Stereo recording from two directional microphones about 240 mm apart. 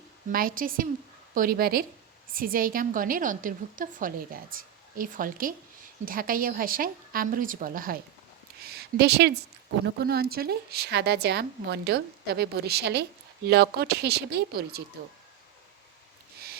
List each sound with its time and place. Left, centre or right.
0.3 s a woman's voice: right
8.6 s a sound: right
9.8 s a woman's voice: right